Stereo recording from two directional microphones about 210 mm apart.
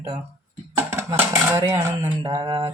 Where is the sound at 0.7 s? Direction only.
10° right (ahead or behind).